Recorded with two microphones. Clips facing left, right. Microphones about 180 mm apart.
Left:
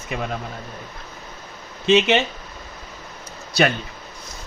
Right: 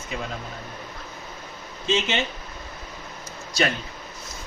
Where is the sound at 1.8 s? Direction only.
70° left (ahead or behind).